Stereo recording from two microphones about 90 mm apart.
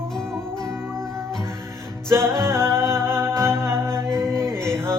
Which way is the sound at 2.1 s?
30° right (ahead or behind).